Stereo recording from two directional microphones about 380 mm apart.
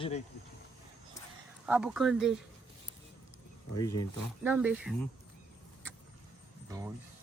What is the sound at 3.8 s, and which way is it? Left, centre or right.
Speech, centre.